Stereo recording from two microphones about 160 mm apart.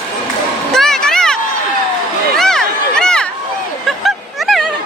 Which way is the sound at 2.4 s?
5° left (ahead or behind).